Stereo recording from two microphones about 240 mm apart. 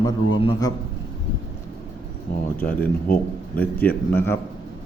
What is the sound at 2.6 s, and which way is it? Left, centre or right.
Speech, left.